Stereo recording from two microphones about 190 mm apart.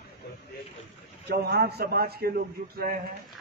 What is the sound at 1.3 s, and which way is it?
A man's voice, 60° right (ahead or behind).